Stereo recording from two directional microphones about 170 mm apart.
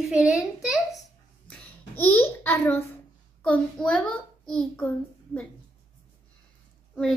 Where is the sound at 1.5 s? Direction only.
10° left (ahead or behind).